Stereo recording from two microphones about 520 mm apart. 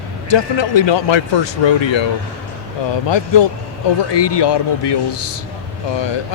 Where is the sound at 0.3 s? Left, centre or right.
Left.